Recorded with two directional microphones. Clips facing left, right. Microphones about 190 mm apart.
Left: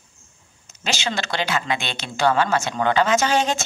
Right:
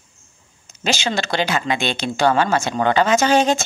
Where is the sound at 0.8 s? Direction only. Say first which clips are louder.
Right 4 dB; 35° right (ahead or behind).